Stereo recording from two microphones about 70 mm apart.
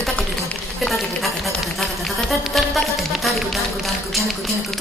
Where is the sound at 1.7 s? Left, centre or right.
Centre.